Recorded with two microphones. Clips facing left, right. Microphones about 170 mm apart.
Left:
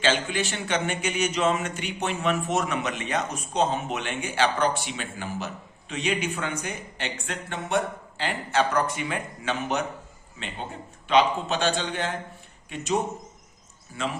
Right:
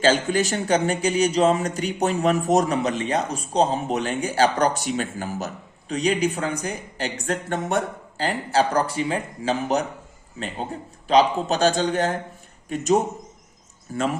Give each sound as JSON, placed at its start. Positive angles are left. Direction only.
{"t": 0.0, "sound": "speech", "side_deg": -40}
{"t": 11.1, "sound": "speech", "side_deg": -40}